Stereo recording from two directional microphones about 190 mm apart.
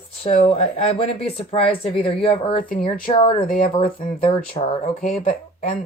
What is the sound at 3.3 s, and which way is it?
Speech, 50° left (ahead or behind).